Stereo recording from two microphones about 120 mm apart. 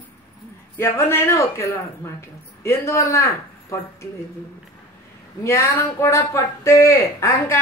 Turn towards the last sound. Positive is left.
turn(degrees=25)  # may be behind; listen again after turning